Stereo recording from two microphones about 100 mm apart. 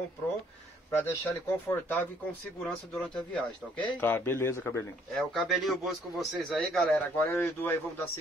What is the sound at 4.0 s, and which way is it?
Speech, 20° left (ahead or behind).